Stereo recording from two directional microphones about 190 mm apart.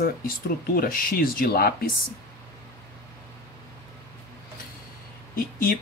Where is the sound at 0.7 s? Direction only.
50° left (ahead or behind).